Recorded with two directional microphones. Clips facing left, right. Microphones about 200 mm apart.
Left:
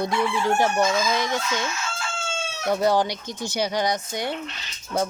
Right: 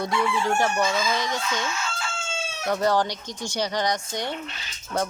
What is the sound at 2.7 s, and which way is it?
Speech, 10° left (ahead or behind).